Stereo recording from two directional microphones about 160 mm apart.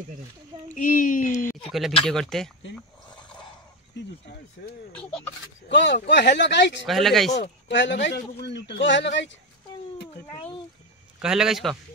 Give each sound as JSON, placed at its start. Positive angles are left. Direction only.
{"t": 0.7, "sound": "speech", "side_deg": 55}
{"t": 1.3, "sound": "speech", "side_deg": 15}
{"t": 1.7, "sound": "a man's voice", "side_deg": 0}
{"t": 4.9, "sound": "speech", "side_deg": 10}
{"t": 5.7, "sound": "a man's voice", "side_deg": 90}
{"t": 6.9, "sound": "a man's voice", "side_deg": 0}
{"t": 7.6, "sound": "a man's voice", "side_deg": 90}
{"t": 11.1, "sound": "a man's voice", "side_deg": -5}